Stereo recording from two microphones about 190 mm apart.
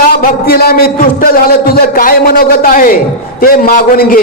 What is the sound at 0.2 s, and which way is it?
A man's voice, 55° left (ahead or behind).